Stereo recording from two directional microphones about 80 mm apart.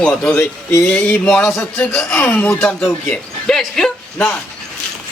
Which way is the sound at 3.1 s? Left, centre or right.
Centre.